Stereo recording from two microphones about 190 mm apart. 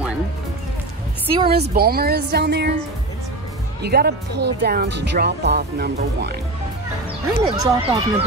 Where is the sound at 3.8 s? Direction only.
55° right (ahead or behind).